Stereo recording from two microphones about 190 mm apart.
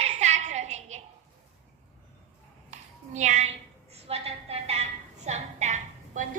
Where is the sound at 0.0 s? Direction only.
35° right (ahead or behind).